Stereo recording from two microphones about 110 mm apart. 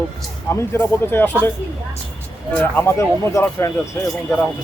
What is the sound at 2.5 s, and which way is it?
Speech, 20° left (ahead or behind).